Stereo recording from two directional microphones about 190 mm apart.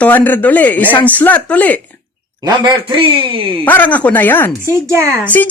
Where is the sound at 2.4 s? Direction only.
20° right (ahead or behind).